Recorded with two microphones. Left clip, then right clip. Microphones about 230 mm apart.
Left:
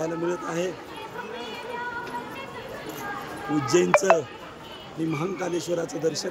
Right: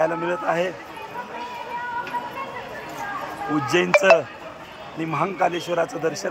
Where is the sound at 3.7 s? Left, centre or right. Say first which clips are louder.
Right 2 dB; centre.